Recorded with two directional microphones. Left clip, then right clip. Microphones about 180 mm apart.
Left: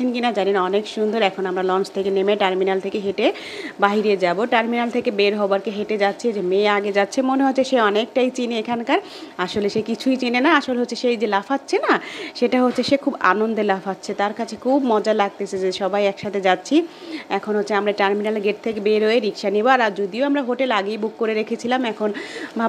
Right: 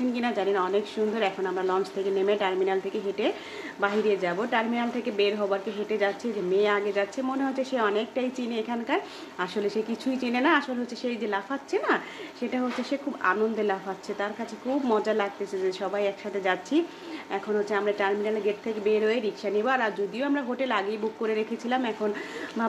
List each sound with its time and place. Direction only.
0.1 s a woman's voice: 40° left (ahead or behind)